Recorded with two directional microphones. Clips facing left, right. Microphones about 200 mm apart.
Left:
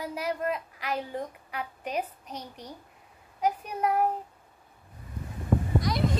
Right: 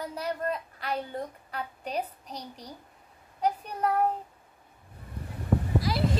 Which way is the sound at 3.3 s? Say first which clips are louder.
Left 1 dB; 5° left (ahead or behind).